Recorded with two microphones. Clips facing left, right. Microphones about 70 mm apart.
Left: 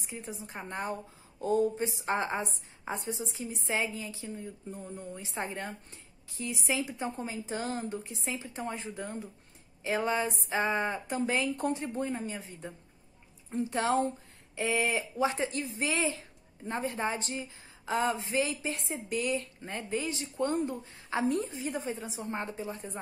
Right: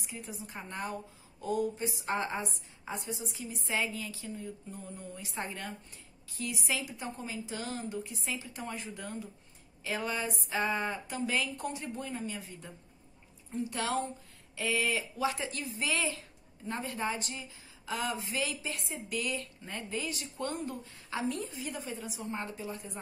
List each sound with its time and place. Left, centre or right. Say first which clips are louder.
0.0 s a woman's voice: left 2 dB; left